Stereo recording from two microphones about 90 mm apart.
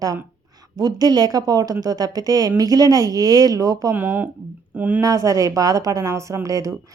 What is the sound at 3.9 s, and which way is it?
Speech, 20° right (ahead or behind).